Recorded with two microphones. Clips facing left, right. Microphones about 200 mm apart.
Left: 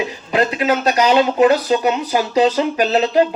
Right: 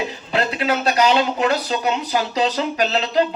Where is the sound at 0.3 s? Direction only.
50° left (ahead or behind).